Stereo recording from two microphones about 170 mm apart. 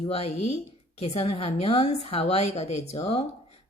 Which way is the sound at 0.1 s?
40° left (ahead or behind).